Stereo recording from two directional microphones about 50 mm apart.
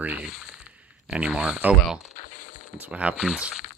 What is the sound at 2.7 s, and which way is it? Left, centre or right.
Speech, right.